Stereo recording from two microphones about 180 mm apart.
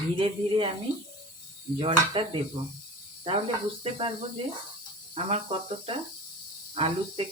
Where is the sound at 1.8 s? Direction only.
30° right (ahead or behind).